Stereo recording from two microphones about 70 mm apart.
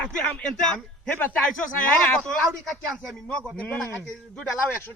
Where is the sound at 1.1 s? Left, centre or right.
Left.